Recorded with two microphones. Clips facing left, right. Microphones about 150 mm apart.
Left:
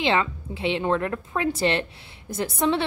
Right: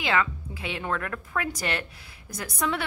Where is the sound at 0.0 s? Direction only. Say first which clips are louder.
Left 3 dB; 25° left (ahead or behind).